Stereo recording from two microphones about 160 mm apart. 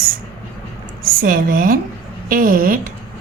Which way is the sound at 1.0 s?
65° right (ahead or behind).